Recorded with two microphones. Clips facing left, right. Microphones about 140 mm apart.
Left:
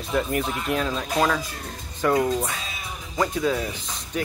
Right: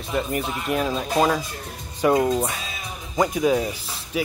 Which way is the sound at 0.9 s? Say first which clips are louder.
Right 2 dB; 20° right (ahead or behind).